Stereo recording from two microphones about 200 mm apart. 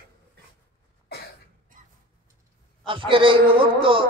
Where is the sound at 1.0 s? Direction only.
55° left (ahead or behind).